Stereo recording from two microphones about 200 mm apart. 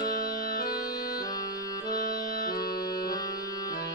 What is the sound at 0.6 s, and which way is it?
Music, 20° left (ahead or behind).